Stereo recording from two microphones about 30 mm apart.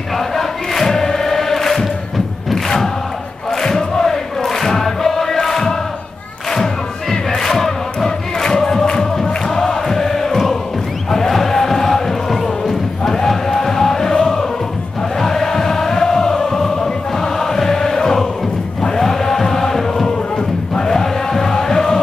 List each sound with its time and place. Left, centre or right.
0.4 s chant: centre
3.6 s chant: centre
6.5 s crowd: centre
8.5 s music: centre
9.8 s chant: centre
11.1 s music: centre
18.8 s a sound: centre
20.8 s music: centre